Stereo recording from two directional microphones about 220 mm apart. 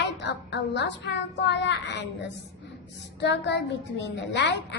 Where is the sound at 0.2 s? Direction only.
50° left (ahead or behind).